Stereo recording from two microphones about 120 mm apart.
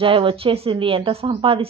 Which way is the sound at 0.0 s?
45° right (ahead or behind).